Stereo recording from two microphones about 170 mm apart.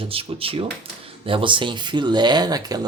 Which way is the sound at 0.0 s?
35° right (ahead or behind).